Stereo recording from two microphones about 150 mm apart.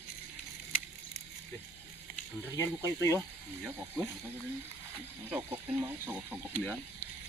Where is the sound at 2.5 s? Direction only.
20° left (ahead or behind).